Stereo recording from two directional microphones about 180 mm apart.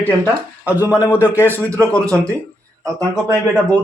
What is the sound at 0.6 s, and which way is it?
Speech, 10° right (ahead or behind).